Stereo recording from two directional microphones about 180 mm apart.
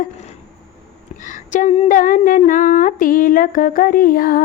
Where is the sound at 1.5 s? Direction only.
40° left (ahead or behind).